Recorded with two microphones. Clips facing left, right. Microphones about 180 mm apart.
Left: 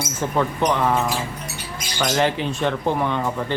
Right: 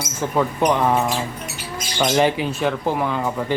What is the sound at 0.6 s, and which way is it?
Speech, 15° right (ahead or behind).